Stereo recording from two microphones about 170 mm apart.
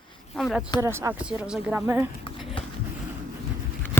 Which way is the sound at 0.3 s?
Centre (ahead or behind).